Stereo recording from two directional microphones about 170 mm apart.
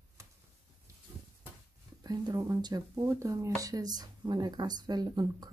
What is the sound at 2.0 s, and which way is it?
Speech, 20° right (ahead or behind).